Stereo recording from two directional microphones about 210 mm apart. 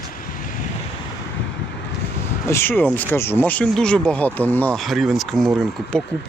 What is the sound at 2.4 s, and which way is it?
Speech, 10° left (ahead or behind).